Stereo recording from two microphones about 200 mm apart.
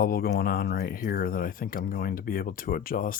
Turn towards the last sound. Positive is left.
turn(degrees=45)  # may be behind; listen again after turning